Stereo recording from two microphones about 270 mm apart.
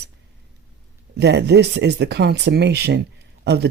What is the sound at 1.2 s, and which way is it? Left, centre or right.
Speech, right.